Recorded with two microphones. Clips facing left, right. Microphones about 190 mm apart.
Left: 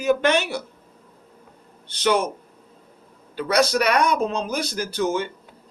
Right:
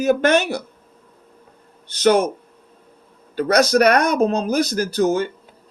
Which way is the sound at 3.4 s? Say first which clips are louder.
Right 5 dB; 45° right (ahead or behind).